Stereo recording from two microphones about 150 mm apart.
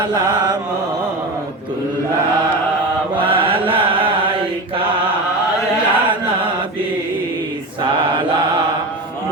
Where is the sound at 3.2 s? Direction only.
35° right (ahead or behind).